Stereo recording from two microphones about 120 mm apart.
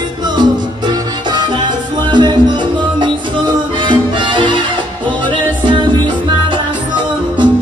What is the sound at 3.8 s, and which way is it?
Music, 45° right (ahead or behind).